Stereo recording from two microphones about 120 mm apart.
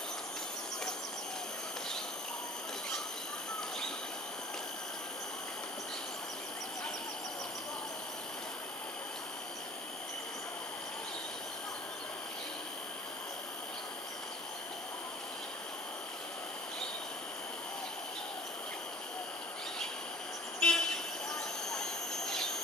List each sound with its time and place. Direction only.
20.6 s toot: 5° left (ahead or behind)